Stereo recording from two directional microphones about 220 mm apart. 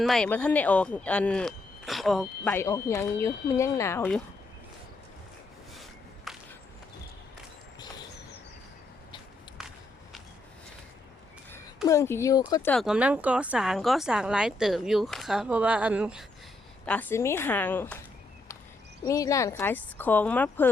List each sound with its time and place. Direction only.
0.0 s speech: centre (ahead or behind)
6.3 s a sound: centre (ahead or behind)
9.6 s walk: centre (ahead or behind)
11.9 s speech: 10° left (ahead or behind)
12.7 s a woman's voice: 5° right (ahead or behind)
16.8 s speech: 5° left (ahead or behind)
19.0 s speech: 15° left (ahead or behind)